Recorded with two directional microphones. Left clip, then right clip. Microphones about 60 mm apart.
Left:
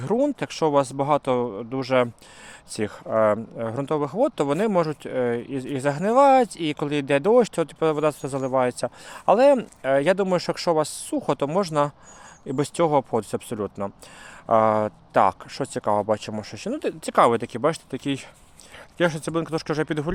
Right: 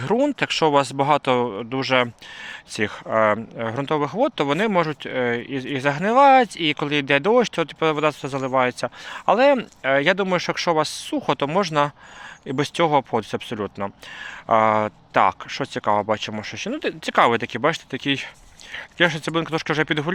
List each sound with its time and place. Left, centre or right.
0.0 s speech: centre
1.8 s speech: left
2.7 s speech: left
4.5 s speech: left
10.2 s speech: left
10.8 s speech: left